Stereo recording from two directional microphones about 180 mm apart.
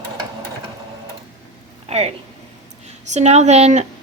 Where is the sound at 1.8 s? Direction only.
35° right (ahead or behind).